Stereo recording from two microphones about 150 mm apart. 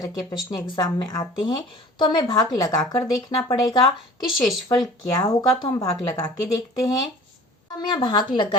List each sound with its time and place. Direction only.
0.0 s speech: 25° left (ahead or behind)
4.4 s speech: centre (ahead or behind)
5.1 s speech: 25° left (ahead or behind)